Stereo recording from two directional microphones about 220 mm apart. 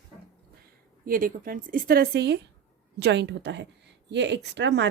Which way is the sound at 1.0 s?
40° right (ahead or behind).